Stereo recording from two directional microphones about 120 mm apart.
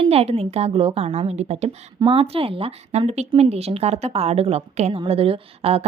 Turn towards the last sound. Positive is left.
turn(degrees=-55)  # may be behind; listen again after turning